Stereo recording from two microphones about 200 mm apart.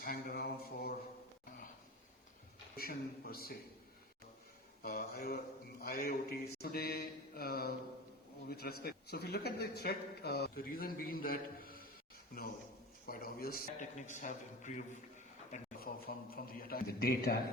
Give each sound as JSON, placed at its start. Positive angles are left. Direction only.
{"t": 0.0, "sound": "a man's voice", "side_deg": 45}
{"t": 2.7, "sound": "a man's voice", "side_deg": 50}
{"t": 4.8, "sound": "a man's voice", "side_deg": 50}
{"t": 13.1, "sound": "a man's voice", "side_deg": 45}